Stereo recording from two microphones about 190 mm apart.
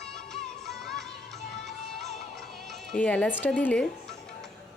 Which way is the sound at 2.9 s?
5° left (ahead or behind).